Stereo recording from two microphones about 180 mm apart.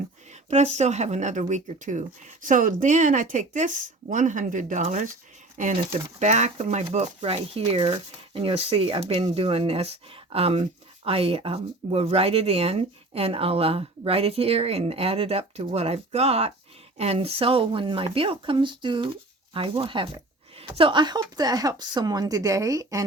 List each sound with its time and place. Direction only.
0.5 s speech: 40° right (ahead or behind)
6.1 s speech: 40° right (ahead or behind); by 23.0 s 20° right (ahead or behind)